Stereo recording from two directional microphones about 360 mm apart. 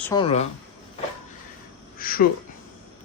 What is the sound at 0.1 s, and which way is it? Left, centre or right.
Speech, centre.